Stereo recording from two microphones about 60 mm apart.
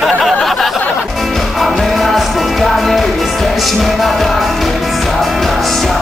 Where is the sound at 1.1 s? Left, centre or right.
Centre.